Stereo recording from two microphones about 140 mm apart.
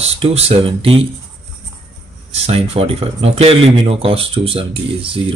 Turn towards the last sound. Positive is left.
turn(degrees=-40)  # may be behind; listen again after turning